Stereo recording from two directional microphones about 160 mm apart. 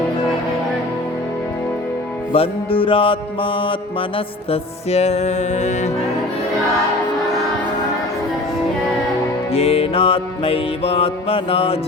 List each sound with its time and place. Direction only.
2.3 s music: 35° left (ahead or behind)
9.5 s music: 40° left (ahead or behind)